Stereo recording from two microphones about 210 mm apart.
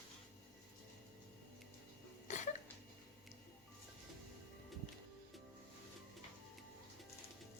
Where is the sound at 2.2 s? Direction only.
35° left (ahead or behind).